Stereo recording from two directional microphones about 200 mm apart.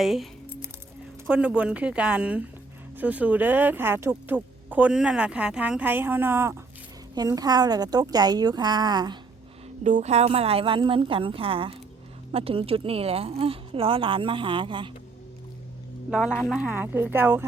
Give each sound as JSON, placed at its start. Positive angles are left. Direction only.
{"t": 0.0, "sound": "music", "side_deg": 0}
{"t": 1.3, "sound": "speech", "side_deg": -5}
{"t": 9.8, "sound": "speech", "side_deg": -35}
{"t": 16.0, "sound": "speech", "side_deg": -5}